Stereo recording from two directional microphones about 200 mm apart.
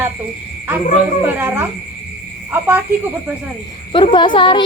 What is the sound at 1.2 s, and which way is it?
A woman's voice, 10° right (ahead or behind).